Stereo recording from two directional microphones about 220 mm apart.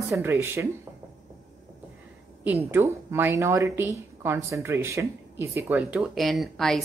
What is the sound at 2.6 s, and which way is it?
Speech, 10° right (ahead or behind).